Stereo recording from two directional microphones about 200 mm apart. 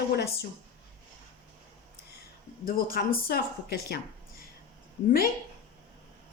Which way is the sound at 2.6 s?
45° left (ahead or behind).